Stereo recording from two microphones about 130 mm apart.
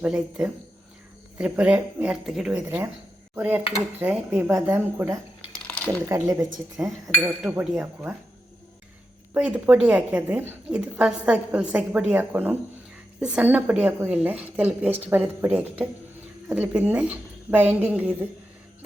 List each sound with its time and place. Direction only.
0.0 s a woman's voice: 10° right (ahead or behind)
5.5 s a sound: 10° left (ahead or behind)
6.1 s speech: 20° right (ahead or behind)
6.7 s speech: 5° right (ahead or behind)
7.8 s speech: 20° right (ahead or behind)
9.3 s a woman's voice: 10° right (ahead or behind)